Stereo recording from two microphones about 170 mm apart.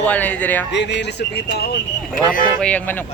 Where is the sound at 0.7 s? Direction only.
90° left; by 1.6 s 75° left (ahead or behind).